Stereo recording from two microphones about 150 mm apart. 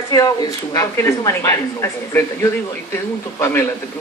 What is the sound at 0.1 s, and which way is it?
A man's voice, 25° left (ahead or behind).